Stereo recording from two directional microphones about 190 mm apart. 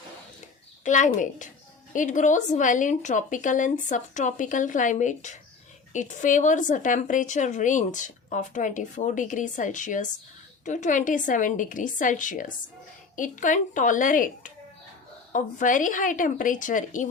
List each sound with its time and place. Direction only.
0.9 s a woman's voice: 40° left (ahead or behind)